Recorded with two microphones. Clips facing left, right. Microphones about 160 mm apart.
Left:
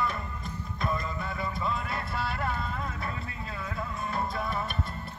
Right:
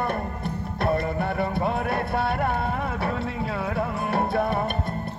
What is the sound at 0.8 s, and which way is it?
Music, 65° right (ahead or behind).